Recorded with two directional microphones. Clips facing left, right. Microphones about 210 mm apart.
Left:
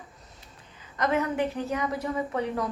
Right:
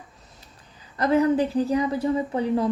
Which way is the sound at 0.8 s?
35° right (ahead or behind).